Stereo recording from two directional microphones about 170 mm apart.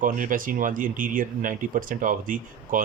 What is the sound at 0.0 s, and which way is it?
Speech, 50° right (ahead or behind).